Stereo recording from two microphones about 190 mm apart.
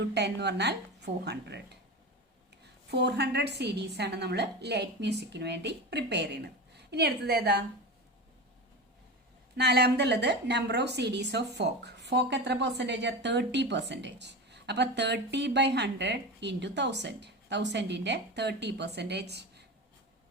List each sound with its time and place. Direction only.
0.0 s a woman's voice: 60° right (ahead or behind)
2.9 s a woman's voice: 60° right (ahead or behind)
9.6 s a woman's voice: 60° right (ahead or behind)